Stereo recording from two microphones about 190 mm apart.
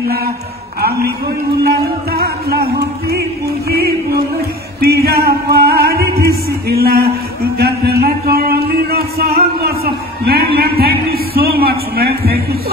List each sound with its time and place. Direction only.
0.7 s a man's voice: 55° right (ahead or behind)
1.7 s music: 55° right (ahead or behind)
4.7 s music: 55° right (ahead or behind)
6.7 s a man's voice: 55° right (ahead or behind)
7.5 s a sound: 55° right (ahead or behind)